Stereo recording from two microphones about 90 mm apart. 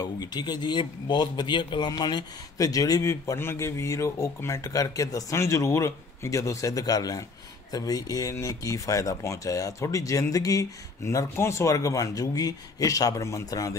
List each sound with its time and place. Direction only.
0.0 s speech: 50° left (ahead or behind)
2.5 s speech: 40° left (ahead or behind)